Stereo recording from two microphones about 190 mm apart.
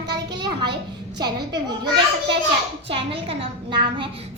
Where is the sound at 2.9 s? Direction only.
30° right (ahead or behind).